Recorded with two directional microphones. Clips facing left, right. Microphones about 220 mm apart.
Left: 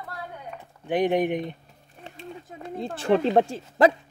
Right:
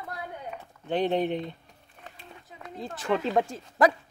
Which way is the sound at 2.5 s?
50° left (ahead or behind).